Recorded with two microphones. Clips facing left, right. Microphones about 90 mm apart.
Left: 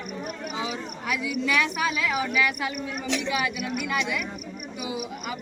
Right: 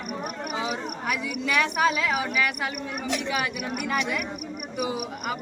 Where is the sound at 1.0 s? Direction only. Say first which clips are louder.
Left 3 dB; 45° right (ahead or behind).